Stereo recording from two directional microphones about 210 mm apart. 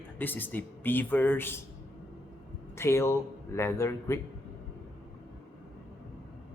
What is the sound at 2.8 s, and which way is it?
A man's voice, 10° left (ahead or behind).